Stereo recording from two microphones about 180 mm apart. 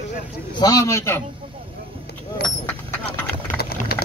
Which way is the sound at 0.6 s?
20° left (ahead or behind).